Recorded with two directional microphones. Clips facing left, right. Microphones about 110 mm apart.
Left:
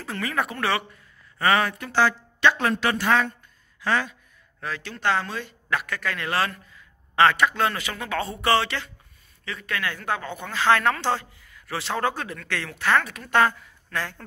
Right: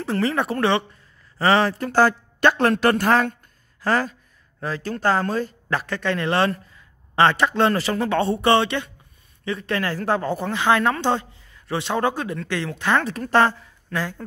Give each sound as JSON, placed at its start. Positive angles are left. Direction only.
{"t": 0.0, "sound": "speech", "side_deg": -30}
{"t": 1.9, "sound": "a woman's voice", "side_deg": -45}
{"t": 3.8, "sound": "a sound", "side_deg": -40}
{"t": 4.9, "sound": "speech", "side_deg": -45}
{"t": 10.5, "sound": "speech", "side_deg": -20}
{"t": 13.0, "sound": "speech", "side_deg": -35}
{"t": 13.9, "sound": "speech", "side_deg": -15}